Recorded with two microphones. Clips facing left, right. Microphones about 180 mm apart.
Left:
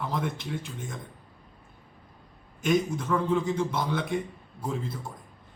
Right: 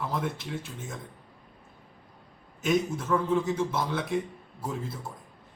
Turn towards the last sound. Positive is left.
turn(degrees=-5)  # may be behind; listen again after turning